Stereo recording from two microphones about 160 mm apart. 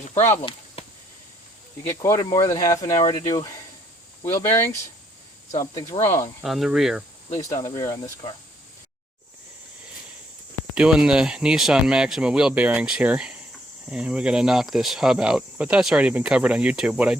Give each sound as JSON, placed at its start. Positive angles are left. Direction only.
{"t": 2.0, "sound": "speech", "side_deg": 20}
{"t": 6.4, "sound": "speech", "side_deg": 0}
{"t": 7.3, "sound": "speech", "side_deg": 20}
{"t": 10.8, "sound": "speech", "side_deg": -5}